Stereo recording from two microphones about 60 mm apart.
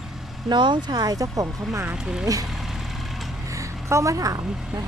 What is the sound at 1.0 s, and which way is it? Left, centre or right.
Speech, right.